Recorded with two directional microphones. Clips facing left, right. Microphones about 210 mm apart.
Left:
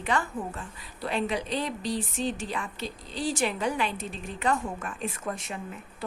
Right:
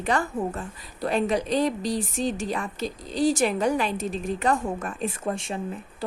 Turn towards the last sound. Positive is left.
turn(degrees=-30)  # may be behind; listen again after turning